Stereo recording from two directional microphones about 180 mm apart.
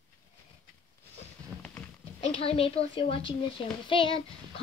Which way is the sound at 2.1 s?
35° left (ahead or behind).